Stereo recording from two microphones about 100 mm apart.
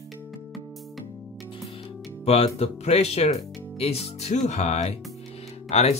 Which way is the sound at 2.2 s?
85° left.